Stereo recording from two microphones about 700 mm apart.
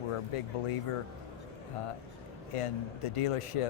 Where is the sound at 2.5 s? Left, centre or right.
Left.